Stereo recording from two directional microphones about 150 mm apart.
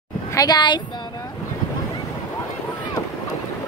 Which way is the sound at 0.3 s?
25° left (ahead or behind).